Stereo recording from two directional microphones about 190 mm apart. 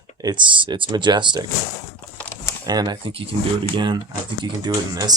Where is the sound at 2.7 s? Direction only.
20° right (ahead or behind).